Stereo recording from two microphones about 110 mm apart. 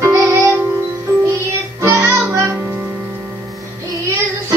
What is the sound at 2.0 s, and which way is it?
Music, 25° right (ahead or behind).